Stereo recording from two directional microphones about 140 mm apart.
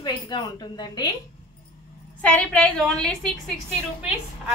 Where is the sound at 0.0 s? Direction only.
30° left (ahead or behind).